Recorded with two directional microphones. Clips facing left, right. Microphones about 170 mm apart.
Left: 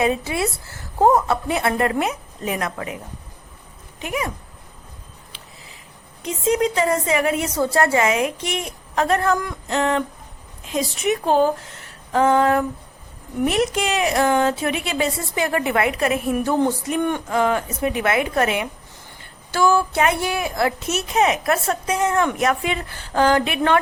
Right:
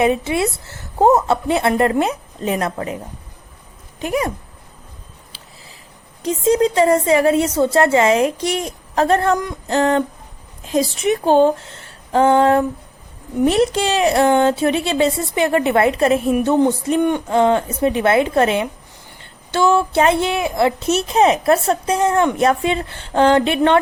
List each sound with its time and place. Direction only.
0.0 s a woman's voice: 25° right (ahead or behind)
4.0 s a woman's voice: 35° right (ahead or behind)
6.2 s a woman's voice: 35° right (ahead or behind)
9.6 s a woman's voice: 35° right (ahead or behind)